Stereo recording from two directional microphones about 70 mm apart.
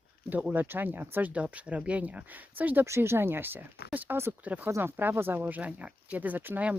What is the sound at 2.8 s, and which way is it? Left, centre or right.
Speech, right.